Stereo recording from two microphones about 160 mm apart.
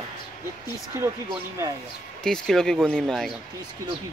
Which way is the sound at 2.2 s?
5° left (ahead or behind).